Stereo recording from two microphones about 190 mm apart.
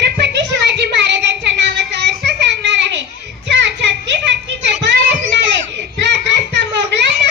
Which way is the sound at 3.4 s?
65° right (ahead or behind).